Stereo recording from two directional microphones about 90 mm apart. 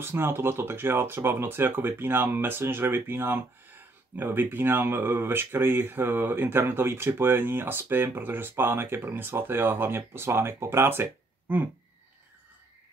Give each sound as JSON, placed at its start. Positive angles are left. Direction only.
{"t": 0.0, "sound": "speech", "side_deg": -25}